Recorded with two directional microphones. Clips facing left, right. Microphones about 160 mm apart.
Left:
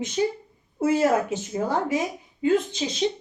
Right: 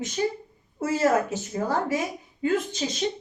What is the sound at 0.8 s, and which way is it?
Speech, 20° left (ahead or behind).